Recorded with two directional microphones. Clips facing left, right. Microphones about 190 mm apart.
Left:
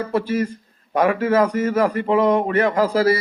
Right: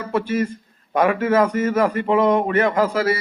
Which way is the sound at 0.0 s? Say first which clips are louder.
Even; 35° left (ahead or behind).